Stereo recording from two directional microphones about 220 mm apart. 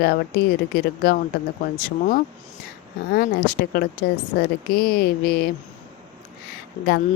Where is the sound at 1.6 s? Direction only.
40° left (ahead or behind).